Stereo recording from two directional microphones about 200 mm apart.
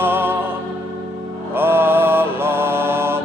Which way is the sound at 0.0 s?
10° right (ahead or behind).